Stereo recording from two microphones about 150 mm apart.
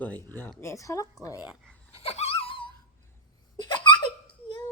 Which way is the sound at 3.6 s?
30° left (ahead or behind).